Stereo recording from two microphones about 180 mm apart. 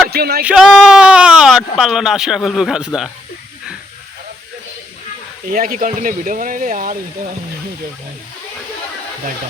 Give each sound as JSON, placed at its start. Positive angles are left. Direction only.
{"t": 0.1, "sound": "a sound", "side_deg": -60}
{"t": 0.4, "sound": "speech", "side_deg": -5}
{"t": 5.5, "sound": "speech", "side_deg": -50}